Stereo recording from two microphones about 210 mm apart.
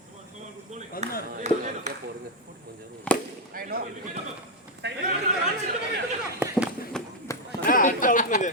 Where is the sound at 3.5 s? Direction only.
45° right (ahead or behind).